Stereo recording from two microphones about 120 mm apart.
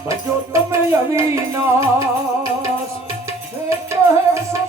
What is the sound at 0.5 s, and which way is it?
Music, 25° right (ahead or behind).